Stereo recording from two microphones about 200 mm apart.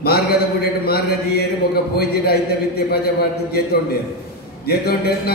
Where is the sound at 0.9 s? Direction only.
50° left (ahead or behind).